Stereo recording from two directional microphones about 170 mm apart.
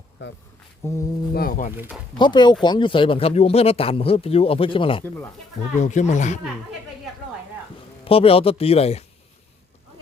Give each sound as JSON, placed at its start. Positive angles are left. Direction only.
{"t": 0.2, "sound": "speech", "side_deg": 90}
{"t": 0.8, "sound": "mantra", "side_deg": 15}
{"t": 1.3, "sound": "speech", "side_deg": 60}
{"t": 1.7, "sound": "speech", "side_deg": -10}
{"t": 2.1, "sound": "speech", "side_deg": 25}
{"t": 5.8, "sound": "speech", "side_deg": 45}
{"t": 8.0, "sound": "speech", "side_deg": 35}